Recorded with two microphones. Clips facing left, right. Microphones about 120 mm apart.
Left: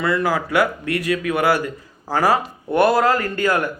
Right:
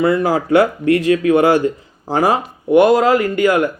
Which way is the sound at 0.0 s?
25° right (ahead or behind).